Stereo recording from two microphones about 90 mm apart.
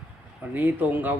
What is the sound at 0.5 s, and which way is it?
Speech, 20° right (ahead or behind).